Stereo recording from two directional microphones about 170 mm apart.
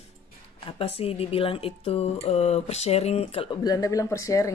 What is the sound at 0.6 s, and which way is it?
Speech, 35° left (ahead or behind).